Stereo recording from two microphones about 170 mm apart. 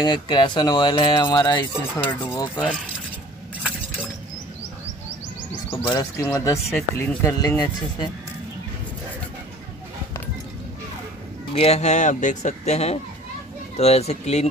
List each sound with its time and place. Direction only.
0.0 s speech: 25° left (ahead or behind)
2.0 s speech: 10° left (ahead or behind)
5.7 s speech: 20° left (ahead or behind)
11.5 s speech: 40° left (ahead or behind)